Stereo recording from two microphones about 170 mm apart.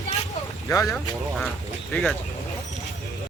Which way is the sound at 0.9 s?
Centre (ahead or behind).